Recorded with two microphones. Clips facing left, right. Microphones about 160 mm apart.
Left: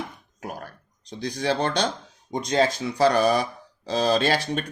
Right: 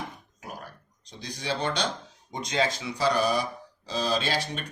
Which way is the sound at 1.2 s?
50° left (ahead or behind).